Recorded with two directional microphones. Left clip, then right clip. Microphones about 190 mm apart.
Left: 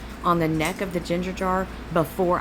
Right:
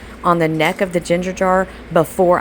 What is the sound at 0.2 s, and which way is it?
Speech, 25° right (ahead or behind).